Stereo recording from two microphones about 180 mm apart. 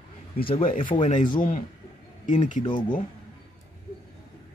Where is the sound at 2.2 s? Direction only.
45° left (ahead or behind).